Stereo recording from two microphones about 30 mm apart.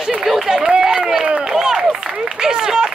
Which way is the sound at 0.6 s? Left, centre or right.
Right.